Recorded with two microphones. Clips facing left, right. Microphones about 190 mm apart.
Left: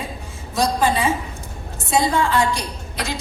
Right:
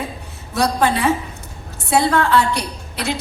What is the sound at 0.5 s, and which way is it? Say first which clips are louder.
A woman's voice: right 1 dB; 65° right (ahead or behind).